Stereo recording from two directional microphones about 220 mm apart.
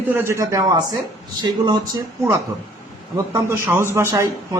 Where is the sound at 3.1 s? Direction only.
10° right (ahead or behind).